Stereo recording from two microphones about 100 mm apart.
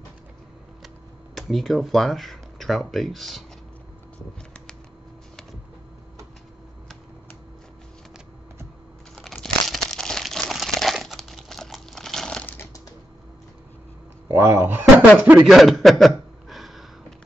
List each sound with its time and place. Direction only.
0.8 s speech: centre (ahead or behind)
9.1 s crumpling: centre (ahead or behind)
14.3 s speech: 20° right (ahead or behind)
15.4 s a sound: centre (ahead or behind)